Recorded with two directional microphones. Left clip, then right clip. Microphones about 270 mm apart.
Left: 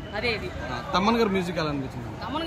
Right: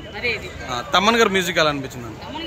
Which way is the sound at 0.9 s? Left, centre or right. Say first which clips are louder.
Right 7 dB; centre.